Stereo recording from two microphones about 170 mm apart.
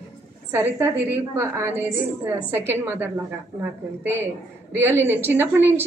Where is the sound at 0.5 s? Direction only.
15° right (ahead or behind).